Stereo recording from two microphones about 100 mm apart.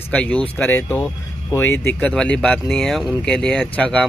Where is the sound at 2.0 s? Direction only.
10° left (ahead or behind).